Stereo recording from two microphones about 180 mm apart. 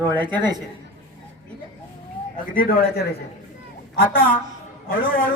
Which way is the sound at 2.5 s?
55° left (ahead or behind).